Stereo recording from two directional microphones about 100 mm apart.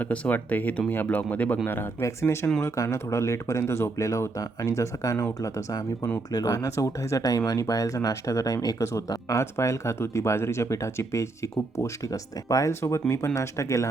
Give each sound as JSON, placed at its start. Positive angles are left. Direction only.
{"t": 0.0, "sound": "speech", "side_deg": 15}